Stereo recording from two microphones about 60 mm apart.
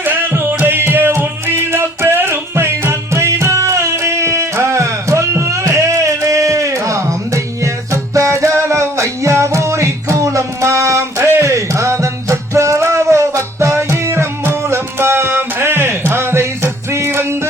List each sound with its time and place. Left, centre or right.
0.0 s music: right